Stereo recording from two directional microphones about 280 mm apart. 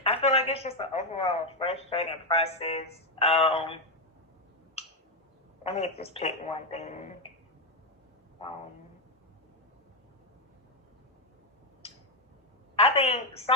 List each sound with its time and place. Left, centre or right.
0.0 s a woman's voice: left
5.6 s a woman's voice: left
12.7 s a woman's voice: left